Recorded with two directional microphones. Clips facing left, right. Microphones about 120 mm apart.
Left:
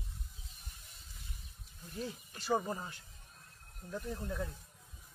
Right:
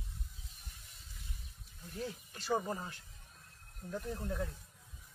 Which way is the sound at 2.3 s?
5° left (ahead or behind).